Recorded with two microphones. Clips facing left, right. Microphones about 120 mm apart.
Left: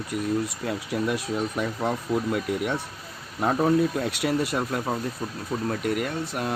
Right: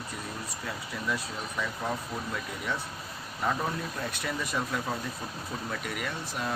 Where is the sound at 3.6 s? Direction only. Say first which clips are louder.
Left 11 dB; 65° left (ahead or behind).